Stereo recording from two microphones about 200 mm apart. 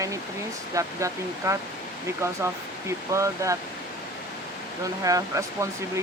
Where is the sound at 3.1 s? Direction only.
15° right (ahead or behind).